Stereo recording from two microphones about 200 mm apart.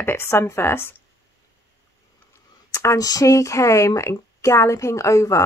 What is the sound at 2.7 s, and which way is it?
Speech, 15° left (ahead or behind).